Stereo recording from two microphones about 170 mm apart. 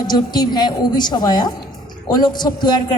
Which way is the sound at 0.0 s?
25° left (ahead or behind).